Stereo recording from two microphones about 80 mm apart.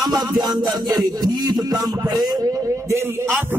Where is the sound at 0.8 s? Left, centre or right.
Right.